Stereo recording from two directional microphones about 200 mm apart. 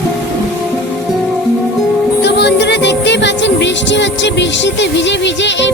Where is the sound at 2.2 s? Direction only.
60° left (ahead or behind).